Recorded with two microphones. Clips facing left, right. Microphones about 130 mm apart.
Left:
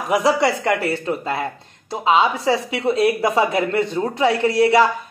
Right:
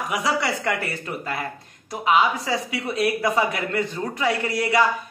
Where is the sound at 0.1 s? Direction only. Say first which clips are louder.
Left 8 dB; 35° left (ahead or behind).